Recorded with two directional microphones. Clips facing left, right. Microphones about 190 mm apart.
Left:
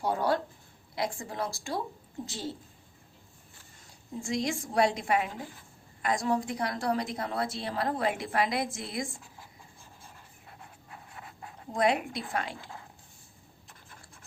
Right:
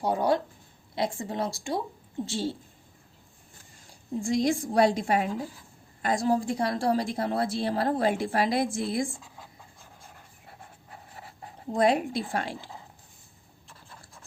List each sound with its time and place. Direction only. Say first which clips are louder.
0.0 s speech: right 3 dB; 20° right (ahead or behind)
4.2 s a woman's voice: right 6 dB; 35° right (ahead or behind)
10.6 s writing: right 1 dB; 40° right (ahead or behind)